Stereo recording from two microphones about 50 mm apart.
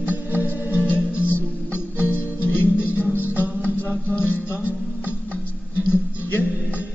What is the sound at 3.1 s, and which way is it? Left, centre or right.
Music, right.